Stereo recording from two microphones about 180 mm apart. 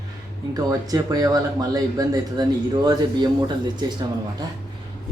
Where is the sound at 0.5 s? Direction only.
20° right (ahead or behind).